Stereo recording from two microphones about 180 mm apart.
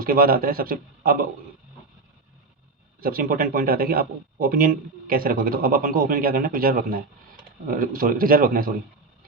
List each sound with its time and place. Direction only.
0.0 s speech: 55° right (ahead or behind)
3.0 s speech: 55° right (ahead or behind)